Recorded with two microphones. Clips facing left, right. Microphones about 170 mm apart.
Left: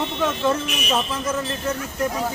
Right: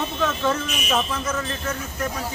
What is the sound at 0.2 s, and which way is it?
Speech, 15° left (ahead or behind).